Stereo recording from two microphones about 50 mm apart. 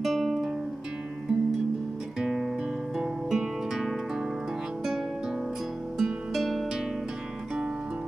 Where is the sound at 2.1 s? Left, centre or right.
Centre.